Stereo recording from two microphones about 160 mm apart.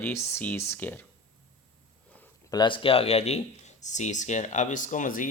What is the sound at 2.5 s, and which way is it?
Speech, 30° left (ahead or behind).